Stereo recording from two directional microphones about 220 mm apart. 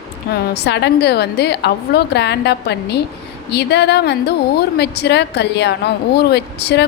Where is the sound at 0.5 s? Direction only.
50° left (ahead or behind).